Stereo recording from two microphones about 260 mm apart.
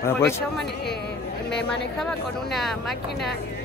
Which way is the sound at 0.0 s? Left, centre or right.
Centre.